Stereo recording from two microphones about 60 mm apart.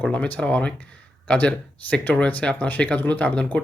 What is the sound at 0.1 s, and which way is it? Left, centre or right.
Speech, centre.